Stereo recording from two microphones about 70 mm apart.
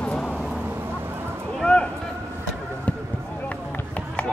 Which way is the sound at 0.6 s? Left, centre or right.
Right.